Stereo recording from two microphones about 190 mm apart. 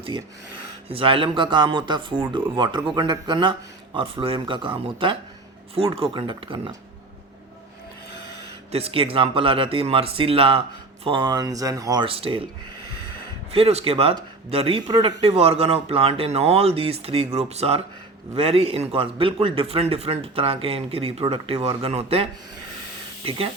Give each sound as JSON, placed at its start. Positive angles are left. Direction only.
{"t": 0.9, "sound": "a man's voice", "side_deg": -30}
{"t": 8.7, "sound": "a man's voice", "side_deg": -30}
{"t": 13.5, "sound": "a man's voice", "side_deg": -30}